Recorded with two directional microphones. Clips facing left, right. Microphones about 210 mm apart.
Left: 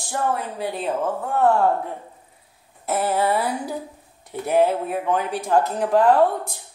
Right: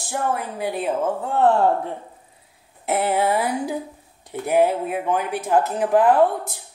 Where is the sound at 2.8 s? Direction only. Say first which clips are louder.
Right 1 dB; 15° right (ahead or behind).